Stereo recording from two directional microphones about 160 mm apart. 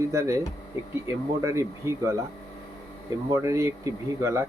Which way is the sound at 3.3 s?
20° right (ahead or behind).